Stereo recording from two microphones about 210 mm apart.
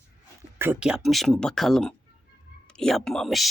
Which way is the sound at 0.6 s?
5° right (ahead or behind).